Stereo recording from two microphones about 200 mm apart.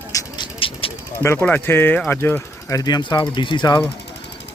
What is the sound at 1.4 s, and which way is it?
Speech, 10° left (ahead or behind).